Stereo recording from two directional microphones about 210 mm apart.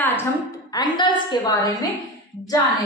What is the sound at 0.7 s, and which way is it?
Speech, 20° left (ahead or behind).